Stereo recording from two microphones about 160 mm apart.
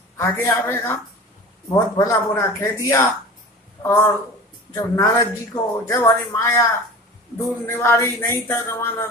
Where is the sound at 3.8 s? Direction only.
15° left (ahead or behind).